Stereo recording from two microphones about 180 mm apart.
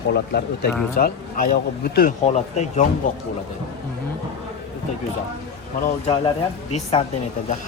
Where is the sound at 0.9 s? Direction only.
55° left (ahead or behind).